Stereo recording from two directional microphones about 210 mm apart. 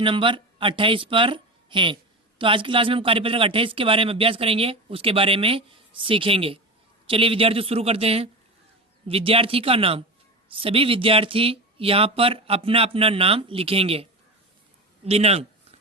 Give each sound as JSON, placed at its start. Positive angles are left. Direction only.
{"t": 0.0, "sound": "a woman's voice", "side_deg": -25}